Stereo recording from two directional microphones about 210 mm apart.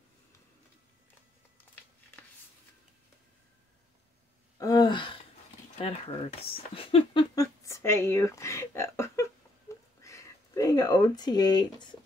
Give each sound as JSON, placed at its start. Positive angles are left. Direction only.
{"t": 4.6, "sound": "gasp", "side_deg": 20}
{"t": 5.8, "sound": "speech", "side_deg": 25}
{"t": 9.7, "sound": "a sound", "side_deg": 15}
{"t": 10.0, "sound": "speech", "side_deg": 15}